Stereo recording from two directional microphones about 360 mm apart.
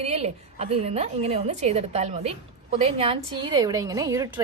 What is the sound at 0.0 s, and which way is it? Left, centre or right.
A woman's voice, centre.